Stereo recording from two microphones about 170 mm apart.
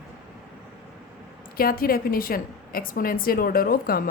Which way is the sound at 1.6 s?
60° left (ahead or behind).